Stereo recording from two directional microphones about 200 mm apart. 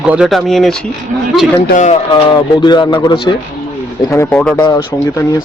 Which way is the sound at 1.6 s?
40° left (ahead or behind).